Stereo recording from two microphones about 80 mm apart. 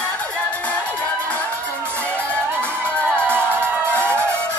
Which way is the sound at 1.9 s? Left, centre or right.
Centre.